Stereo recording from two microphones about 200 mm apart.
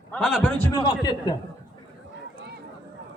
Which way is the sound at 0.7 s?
20° left (ahead or behind).